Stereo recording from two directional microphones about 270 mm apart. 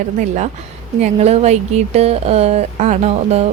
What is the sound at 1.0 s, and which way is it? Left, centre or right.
Speech, right.